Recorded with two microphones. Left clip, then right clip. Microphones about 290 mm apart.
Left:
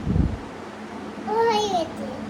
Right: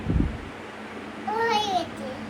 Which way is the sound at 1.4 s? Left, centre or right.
Centre.